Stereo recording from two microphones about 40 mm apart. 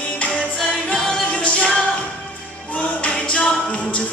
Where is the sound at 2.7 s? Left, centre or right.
Left.